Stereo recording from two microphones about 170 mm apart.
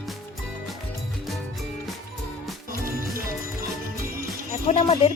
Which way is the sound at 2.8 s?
60° right (ahead or behind).